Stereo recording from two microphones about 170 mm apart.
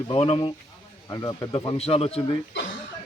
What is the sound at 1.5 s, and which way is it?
Speech, 35° left (ahead or behind).